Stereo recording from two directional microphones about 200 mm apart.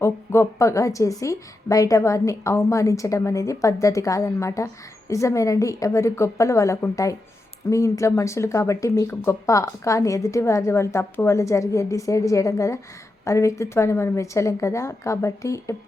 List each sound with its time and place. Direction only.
0.0 s a woman's voice: 15° left (ahead or behind)